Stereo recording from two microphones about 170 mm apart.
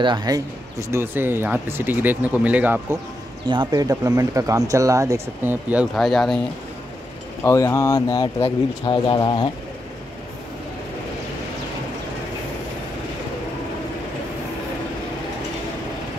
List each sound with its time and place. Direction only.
0.0 s speech: 25° right (ahead or behind); by 3.0 s 10° right (ahead or behind)
3.4 s speech: 25° right (ahead or behind)
5.9 s speech: centre (ahead or behind)
7.4 s speech: 15° left (ahead or behind)